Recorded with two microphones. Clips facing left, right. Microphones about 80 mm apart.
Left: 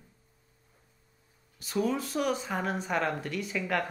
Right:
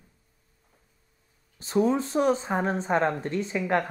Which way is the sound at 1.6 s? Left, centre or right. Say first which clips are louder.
Right 6 dB; right.